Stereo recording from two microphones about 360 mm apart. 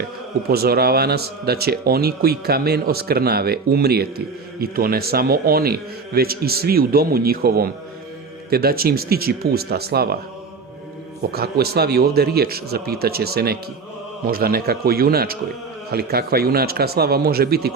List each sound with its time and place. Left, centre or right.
0.4 s speech: right
11.3 s speech: right